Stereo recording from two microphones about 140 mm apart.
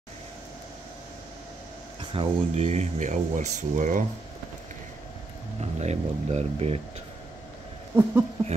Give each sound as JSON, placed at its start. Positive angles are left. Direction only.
{"t": 2.1, "sound": "speech", "side_deg": -50}
{"t": 5.6, "sound": "speech", "side_deg": -55}
{"t": 7.9, "sound": "speech", "side_deg": -10}